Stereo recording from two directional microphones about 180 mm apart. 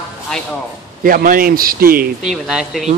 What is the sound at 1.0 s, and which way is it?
Speech, 55° right (ahead or behind).